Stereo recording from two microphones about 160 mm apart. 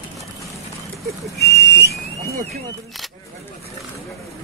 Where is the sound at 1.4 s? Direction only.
90° left.